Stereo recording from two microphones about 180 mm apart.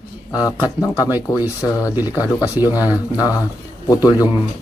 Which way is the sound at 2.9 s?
20° left (ahead or behind).